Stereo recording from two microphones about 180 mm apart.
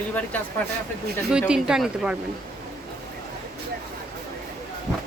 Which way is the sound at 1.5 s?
5° right (ahead or behind).